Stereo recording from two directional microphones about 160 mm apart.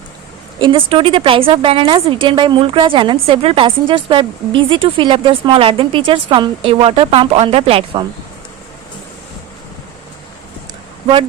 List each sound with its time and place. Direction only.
0.6 s a woman's voice: 35° right (ahead or behind)